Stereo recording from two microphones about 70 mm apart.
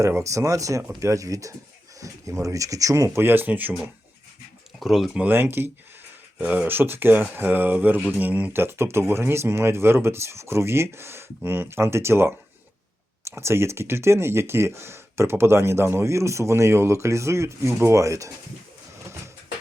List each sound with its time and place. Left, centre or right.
0.2 s speech: right
3.2 s speech: right
4.8 s speech: centre
5.3 s speech: right
6.4 s speech: centre
6.7 s speech: right